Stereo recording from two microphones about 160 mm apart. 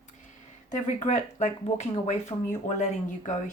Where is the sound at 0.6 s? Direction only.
50° left (ahead or behind).